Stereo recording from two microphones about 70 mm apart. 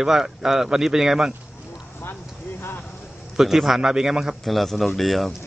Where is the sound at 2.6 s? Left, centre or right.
Left.